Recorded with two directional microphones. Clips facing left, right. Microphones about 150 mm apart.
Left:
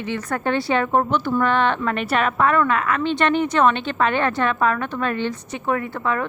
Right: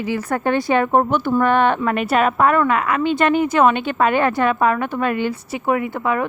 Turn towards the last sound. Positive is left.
turn(degrees=-15)  # may be behind; listen again after turning